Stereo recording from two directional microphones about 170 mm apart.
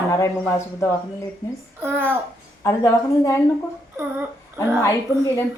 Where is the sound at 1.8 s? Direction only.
10° right (ahead or behind).